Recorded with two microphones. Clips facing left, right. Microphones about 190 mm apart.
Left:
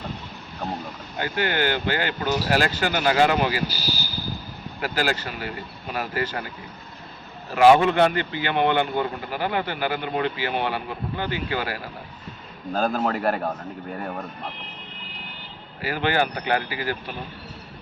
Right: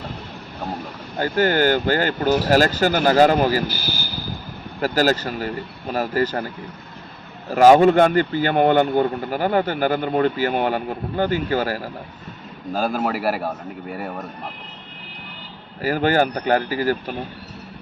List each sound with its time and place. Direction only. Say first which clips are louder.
1.2 s speech: right 6 dB; 40° right (ahead or behind)
4.8 s speech: right 7 dB; 40° right (ahead or behind)
7.5 s speech: right 4 dB; 40° right (ahead or behind)
12.7 s a man's voice: right 1 dB; 10° right (ahead or behind)
15.8 s speech: right 5 dB; 40° right (ahead or behind)